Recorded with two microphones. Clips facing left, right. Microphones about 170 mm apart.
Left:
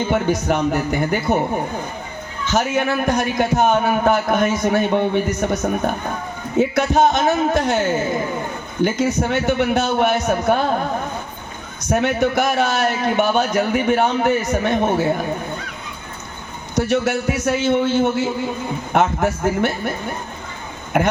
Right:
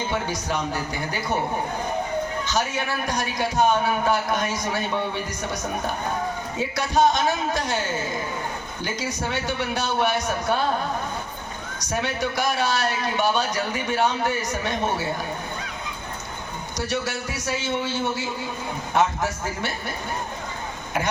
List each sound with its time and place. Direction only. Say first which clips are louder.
0.1 s speech: left 8 dB; 55° left (ahead or behind)
2.5 s a man's voice: left 12 dB; 50° left (ahead or behind)
9.3 s a man's voice: left 9 dB; 50° left (ahead or behind)
11.9 s a man's voice: left 9 dB; 50° left (ahead or behind)
16.7 s a man's voice: left 9 dB; 55° left (ahead or behind)